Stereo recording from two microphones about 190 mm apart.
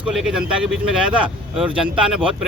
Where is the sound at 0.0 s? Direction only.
Centre (ahead or behind).